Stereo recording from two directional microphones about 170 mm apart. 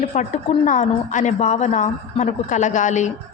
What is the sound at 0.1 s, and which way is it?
A woman's voice, 45° left (ahead or behind).